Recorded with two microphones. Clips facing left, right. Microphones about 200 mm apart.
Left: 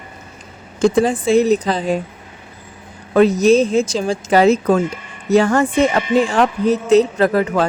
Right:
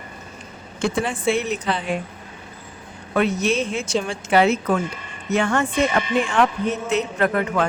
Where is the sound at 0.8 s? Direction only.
35° left (ahead or behind).